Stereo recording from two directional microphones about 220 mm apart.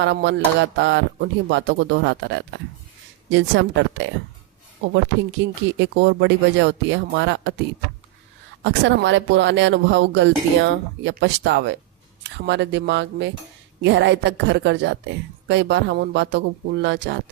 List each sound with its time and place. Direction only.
0.0 s a woman's voice: 55° right (ahead or behind)
5.4 s a woman's voice: 50° right (ahead or behind)
8.6 s a woman's voice: 55° right (ahead or behind)